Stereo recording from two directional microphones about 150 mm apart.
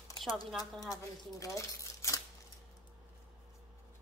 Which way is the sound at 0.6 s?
25° left (ahead or behind).